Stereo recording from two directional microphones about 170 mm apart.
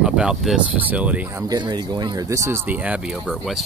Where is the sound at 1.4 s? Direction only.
25° right (ahead or behind); by 3.6 s centre (ahead or behind).